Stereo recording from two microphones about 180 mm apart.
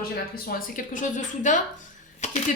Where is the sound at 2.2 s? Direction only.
40° left (ahead or behind).